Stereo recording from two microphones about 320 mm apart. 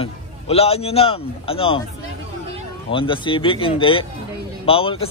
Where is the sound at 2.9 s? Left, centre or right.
Centre.